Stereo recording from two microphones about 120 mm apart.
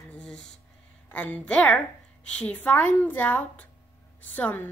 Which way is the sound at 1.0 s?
10° left (ahead or behind).